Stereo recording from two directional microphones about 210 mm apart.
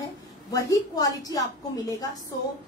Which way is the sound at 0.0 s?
15° left (ahead or behind).